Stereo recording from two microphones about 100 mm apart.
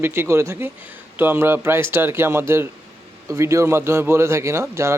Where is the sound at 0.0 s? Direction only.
25° right (ahead or behind).